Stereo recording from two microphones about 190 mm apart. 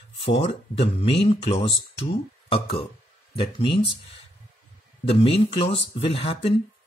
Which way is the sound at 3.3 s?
25° left (ahead or behind).